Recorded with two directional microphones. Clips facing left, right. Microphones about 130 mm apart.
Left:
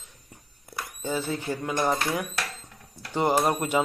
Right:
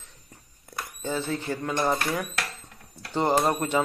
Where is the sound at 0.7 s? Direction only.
5° left (ahead or behind).